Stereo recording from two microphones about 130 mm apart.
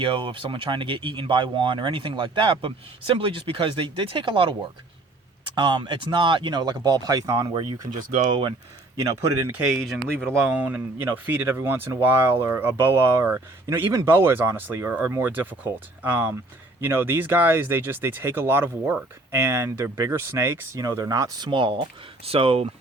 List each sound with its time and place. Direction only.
0.0 s speech: 40° right (ahead or behind)
9.0 s speech: 30° right (ahead or behind)
10.4 s speech: 10° right (ahead or behind); by 22.6 s 45° right (ahead or behind)